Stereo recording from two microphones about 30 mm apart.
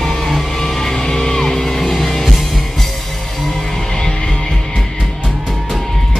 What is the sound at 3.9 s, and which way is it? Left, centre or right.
Music, centre.